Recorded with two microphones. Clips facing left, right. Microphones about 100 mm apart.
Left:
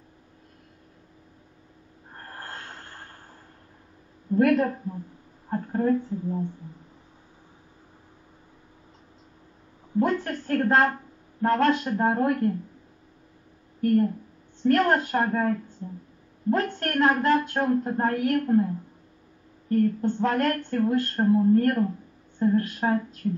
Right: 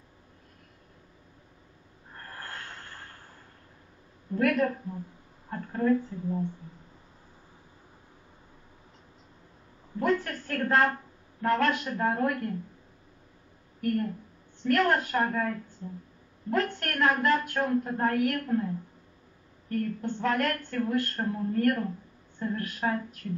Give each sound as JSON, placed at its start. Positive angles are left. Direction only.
{"t": 2.1, "sound": "snort", "side_deg": 30}
{"t": 4.4, "sound": "speech", "side_deg": 30}
{"t": 9.9, "sound": "speech", "side_deg": 30}
{"t": 13.7, "sound": "speech", "side_deg": 30}
{"t": 19.7, "sound": "speech", "side_deg": 35}